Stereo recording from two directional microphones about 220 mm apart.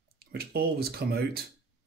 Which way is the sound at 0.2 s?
45° right (ahead or behind).